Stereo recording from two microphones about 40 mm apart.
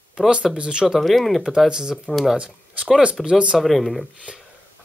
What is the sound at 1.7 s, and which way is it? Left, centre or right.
Speech, centre.